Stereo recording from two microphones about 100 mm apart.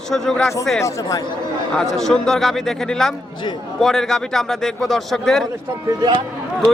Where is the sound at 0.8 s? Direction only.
35° left (ahead or behind).